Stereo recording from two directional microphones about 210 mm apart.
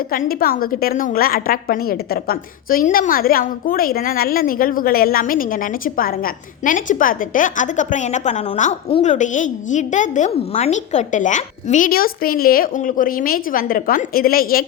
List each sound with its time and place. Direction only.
0.1 s a woman's voice: 45° left (ahead or behind)